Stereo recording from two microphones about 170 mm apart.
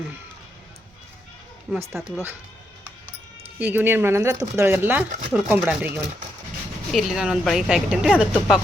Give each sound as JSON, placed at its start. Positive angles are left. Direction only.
{"t": 2.0, "sound": "speech", "side_deg": 0}
{"t": 3.6, "sound": "speech", "side_deg": -10}
{"t": 5.0, "sound": "speech", "side_deg": -45}
{"t": 5.3, "sound": "speech", "side_deg": -5}